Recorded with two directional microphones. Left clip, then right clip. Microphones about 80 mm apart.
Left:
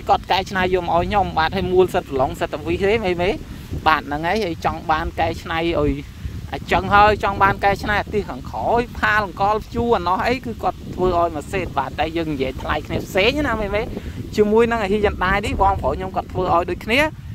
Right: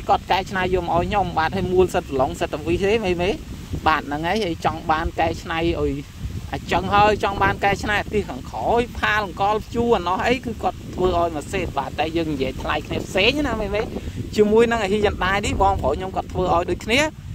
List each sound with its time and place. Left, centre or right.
0.0 s speech: left
2.2 s speech: left
3.8 s speech: left; by 11.8 s centre
11.8 s speech: left
13.6 s speech: left
14.4 s speech: centre